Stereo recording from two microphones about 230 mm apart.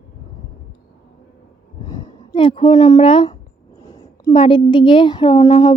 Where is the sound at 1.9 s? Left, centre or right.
Centre.